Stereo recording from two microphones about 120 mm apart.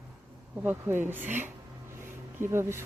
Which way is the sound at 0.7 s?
15° right (ahead or behind).